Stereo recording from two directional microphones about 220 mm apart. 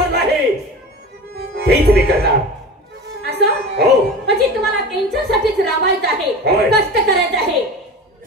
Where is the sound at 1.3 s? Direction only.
45° right (ahead or behind).